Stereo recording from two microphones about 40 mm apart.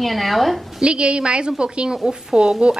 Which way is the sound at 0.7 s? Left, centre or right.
Right.